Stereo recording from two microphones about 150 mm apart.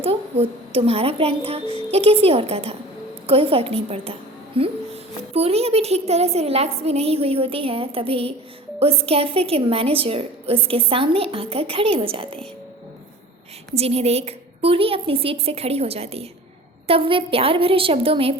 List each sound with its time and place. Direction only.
0.0 s a child's voice: 40° right (ahead or behind)
13.7 s a woman's voice: 45° right (ahead or behind)